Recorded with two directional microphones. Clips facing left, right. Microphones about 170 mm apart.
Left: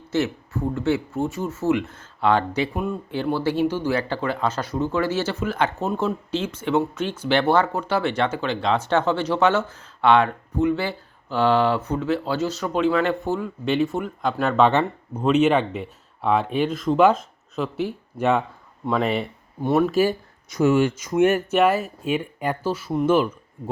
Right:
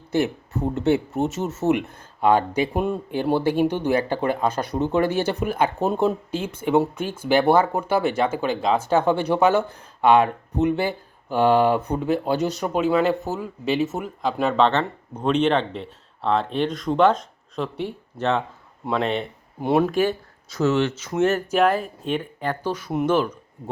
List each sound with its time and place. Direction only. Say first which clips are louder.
0.1 s speech: right 1 dB; 20° right (ahead or behind)
2.7 s speech: right 3 dB; 25° right (ahead or behind); by 14.7 s centre (ahead or behind)
14.7 s speech: left 2 dB; 15° left (ahead or behind)